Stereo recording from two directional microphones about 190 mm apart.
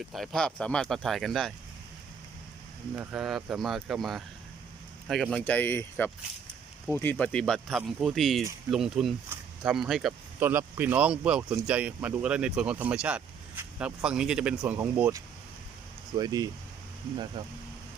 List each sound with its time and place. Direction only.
0.1 s speech: centre (ahead or behind)
3.0 s speech: 5° right (ahead or behind); by 17.5 s 20° right (ahead or behind)